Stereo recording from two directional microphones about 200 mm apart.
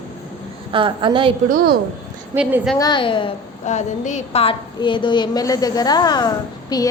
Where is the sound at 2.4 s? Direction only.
5° right (ahead or behind).